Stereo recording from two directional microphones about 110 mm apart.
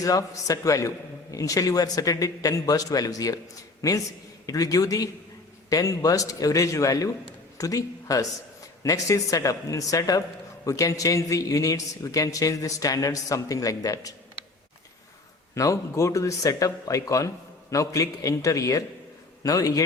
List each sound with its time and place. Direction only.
0.0 s a man's voice: 30° left (ahead or behind)
15.5 s a man's voice: 30° left (ahead or behind)